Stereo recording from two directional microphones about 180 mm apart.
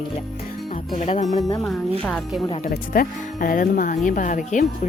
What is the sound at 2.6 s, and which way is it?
Speech, 50° left (ahead or behind).